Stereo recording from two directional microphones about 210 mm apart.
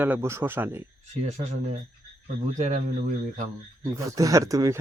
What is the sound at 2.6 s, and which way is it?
Speech, 35° right (ahead or behind).